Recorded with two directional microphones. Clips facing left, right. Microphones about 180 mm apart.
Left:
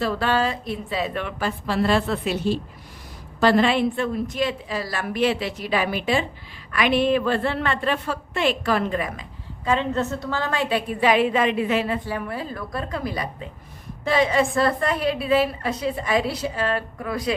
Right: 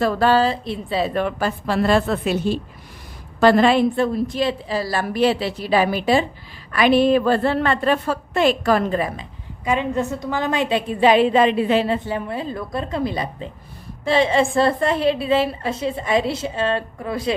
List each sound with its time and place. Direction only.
0.0 s a woman's voice: 40° right (ahead or behind)
9.6 s a woman's voice: 15° right (ahead or behind)